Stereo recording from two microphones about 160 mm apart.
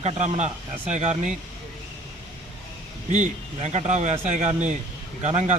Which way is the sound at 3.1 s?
45° right (ahead or behind).